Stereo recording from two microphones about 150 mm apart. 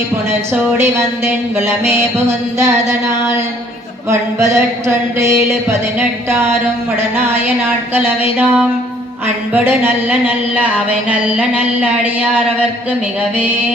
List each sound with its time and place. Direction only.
0.5 s speech: 15° right (ahead or behind)
3.1 s a sound: 20° right (ahead or behind)
6.0 s speech: 15° right (ahead or behind)